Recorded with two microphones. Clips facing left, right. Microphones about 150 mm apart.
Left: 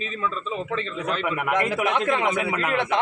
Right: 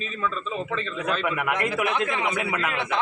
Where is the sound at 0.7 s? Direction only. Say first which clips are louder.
Even; 25° left (ahead or behind).